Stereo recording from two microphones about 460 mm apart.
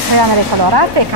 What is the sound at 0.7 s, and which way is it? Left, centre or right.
Speech, right.